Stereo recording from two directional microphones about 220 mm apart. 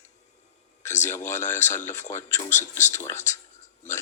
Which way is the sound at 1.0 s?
10° left (ahead or behind).